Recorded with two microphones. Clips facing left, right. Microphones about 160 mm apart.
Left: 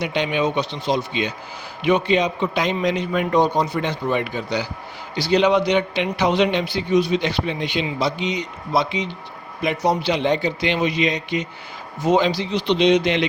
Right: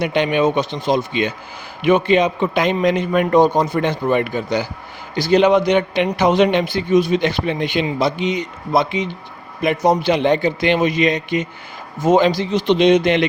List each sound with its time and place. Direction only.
0.0 s speech: 55° right (ahead or behind)